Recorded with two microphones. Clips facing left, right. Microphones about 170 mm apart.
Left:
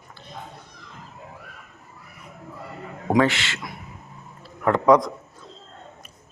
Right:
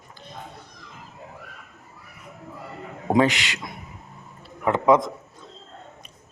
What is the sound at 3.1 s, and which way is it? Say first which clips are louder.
Speech: even; 15° right (ahead or behind).